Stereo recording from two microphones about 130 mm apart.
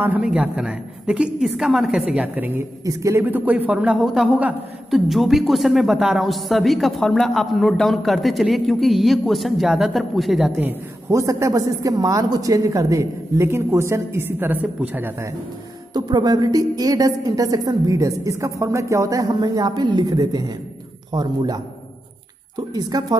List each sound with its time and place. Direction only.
0.0 s a woman's voice: 10° right (ahead or behind)
2.8 s a woman's voice: 25° right (ahead or behind); by 10.5 s centre (ahead or behind)
10.6 s a woman's voice: 20° right (ahead or behind)
15.9 s a woman's voice: 30° right (ahead or behind)
22.8 s a woman's voice: 30° right (ahead or behind)